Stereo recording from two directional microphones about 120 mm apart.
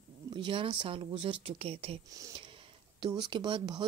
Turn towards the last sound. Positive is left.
turn(degrees=-40)  # may be behind; listen again after turning